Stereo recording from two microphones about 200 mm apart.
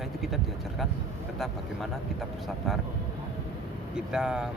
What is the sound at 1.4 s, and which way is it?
Speech, centre (ahead or behind).